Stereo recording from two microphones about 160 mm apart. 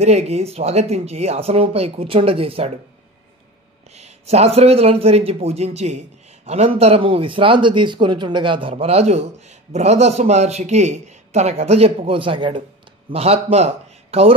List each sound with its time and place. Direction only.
0.0 s speech: 45° right (ahead or behind)
3.9 s a man's voice: 40° right (ahead or behind)